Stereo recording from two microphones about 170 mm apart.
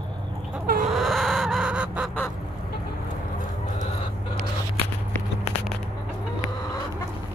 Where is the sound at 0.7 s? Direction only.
50° right (ahead or behind).